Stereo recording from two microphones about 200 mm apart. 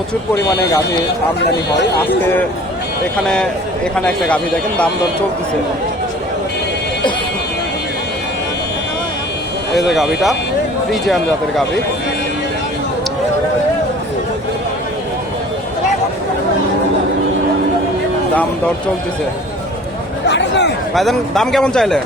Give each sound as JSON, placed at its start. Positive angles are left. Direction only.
{"t": 3.2, "sound": "a man's voice", "side_deg": 5}
{"t": 11.0, "sound": "a man's voice", "side_deg": 0}
{"t": 20.2, "sound": "a sound", "side_deg": 60}
{"t": 20.9, "sound": "a man's voice", "side_deg": 0}